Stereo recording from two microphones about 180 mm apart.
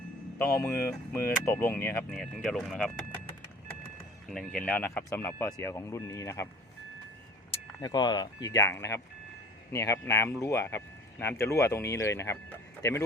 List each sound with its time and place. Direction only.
0.3 s speech: 10° left (ahead or behind)
2.0 s speech: centre (ahead or behind)
4.3 s speech: 5° left (ahead or behind)
7.8 s speech: 25° left (ahead or behind)